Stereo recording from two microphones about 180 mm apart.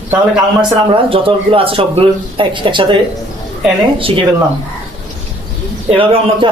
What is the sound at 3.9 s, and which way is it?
Speech, 30° right (ahead or behind).